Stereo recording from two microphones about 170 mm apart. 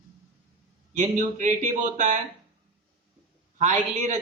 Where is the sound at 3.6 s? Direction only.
45° right (ahead or behind).